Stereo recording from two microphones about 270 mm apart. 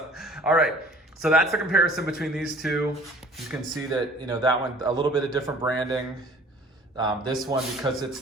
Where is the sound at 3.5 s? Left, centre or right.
Centre.